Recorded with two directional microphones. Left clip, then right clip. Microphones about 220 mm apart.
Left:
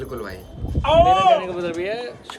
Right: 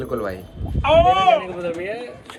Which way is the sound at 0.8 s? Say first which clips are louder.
Even; 15° left (ahead or behind).